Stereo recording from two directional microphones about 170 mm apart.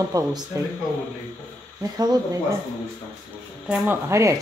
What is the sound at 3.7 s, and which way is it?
Speech, 15° right (ahead or behind).